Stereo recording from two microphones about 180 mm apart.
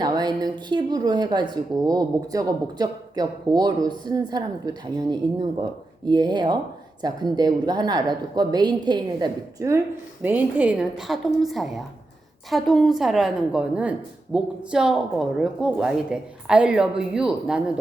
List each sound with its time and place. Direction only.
0.0 s a woman's voice: 20° right (ahead or behind); by 17.6 s 5° right (ahead or behind)